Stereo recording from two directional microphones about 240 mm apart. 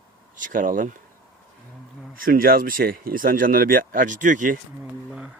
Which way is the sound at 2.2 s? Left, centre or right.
Right.